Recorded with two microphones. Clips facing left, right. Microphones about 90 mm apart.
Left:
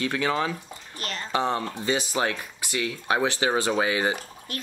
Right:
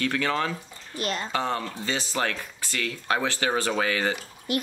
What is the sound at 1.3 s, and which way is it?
Speech, 20° left (ahead or behind).